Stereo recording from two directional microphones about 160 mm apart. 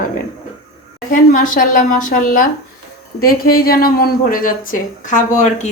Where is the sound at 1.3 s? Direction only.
55° left (ahead or behind).